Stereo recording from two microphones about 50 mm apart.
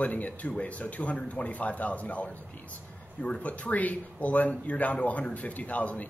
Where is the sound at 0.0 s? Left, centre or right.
Left.